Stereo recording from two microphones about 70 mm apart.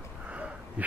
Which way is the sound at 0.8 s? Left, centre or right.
Centre.